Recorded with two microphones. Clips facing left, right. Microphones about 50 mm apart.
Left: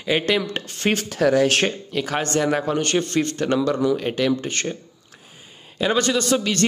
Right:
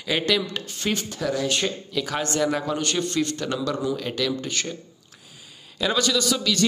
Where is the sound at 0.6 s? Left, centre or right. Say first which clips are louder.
Left 5 dB; left.